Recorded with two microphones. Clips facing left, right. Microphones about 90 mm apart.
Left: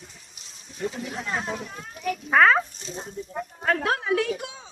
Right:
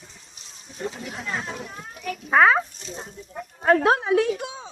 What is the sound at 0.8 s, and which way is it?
Speech, 30° right (ahead or behind).